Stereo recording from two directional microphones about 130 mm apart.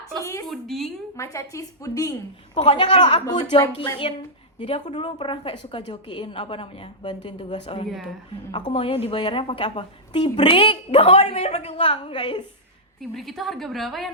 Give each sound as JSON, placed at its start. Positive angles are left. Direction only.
{"t": 0.2, "sound": "a woman's voice", "side_deg": 25}
{"t": 0.4, "sound": "a woman's voice", "side_deg": 0}
{"t": 1.1, "sound": "a woman's voice", "side_deg": 25}
{"t": 2.6, "sound": "a woman's voice", "side_deg": 40}
{"t": 13.0, "sound": "a woman's voice", "side_deg": 0}